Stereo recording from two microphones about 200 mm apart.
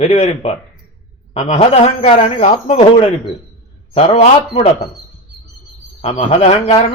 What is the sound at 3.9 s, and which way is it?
Speech, 30° left (ahead or behind).